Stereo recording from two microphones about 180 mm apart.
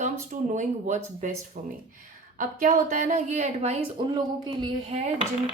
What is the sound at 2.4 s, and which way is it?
A woman's voice, 45° right (ahead or behind).